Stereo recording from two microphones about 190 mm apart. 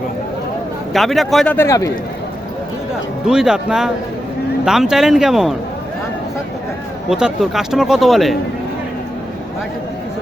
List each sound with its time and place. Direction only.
0.9 s speech: centre (ahead or behind)
1.5 s a man's voice: 15° left (ahead or behind)
3.2 s speech: 5° right (ahead or behind)
7.1 s speech: 5° right (ahead or behind)